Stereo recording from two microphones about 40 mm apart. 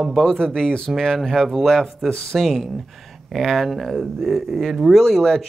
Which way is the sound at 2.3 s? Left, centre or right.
Centre.